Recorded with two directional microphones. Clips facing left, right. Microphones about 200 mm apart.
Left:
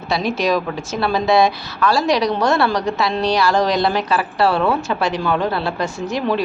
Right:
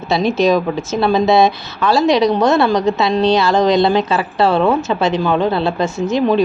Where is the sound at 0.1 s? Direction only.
25° right (ahead or behind).